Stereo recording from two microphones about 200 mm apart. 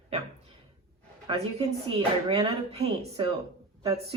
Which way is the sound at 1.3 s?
25° right (ahead or behind).